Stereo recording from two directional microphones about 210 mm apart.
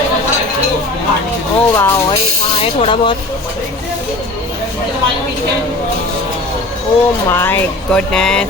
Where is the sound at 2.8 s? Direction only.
25° left (ahead or behind).